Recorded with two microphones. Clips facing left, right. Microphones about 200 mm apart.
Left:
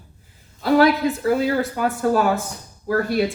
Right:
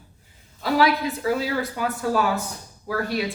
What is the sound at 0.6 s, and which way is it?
Speech, 50° left (ahead or behind).